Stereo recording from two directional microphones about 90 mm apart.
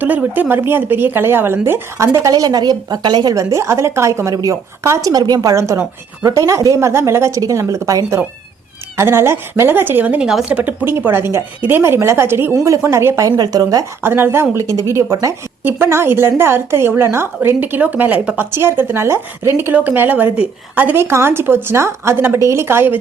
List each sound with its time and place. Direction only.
0.0 s a woman's voice: 20° right (ahead or behind); by 5.1 s 35° right (ahead or behind)
5.1 s a woman's voice: 50° right (ahead or behind)
13.3 s speech: 50° right (ahead or behind)
14.0 s a woman's voice: 25° right (ahead or behind)